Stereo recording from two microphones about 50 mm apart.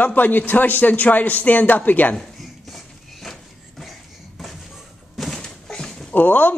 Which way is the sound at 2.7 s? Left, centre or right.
Centre.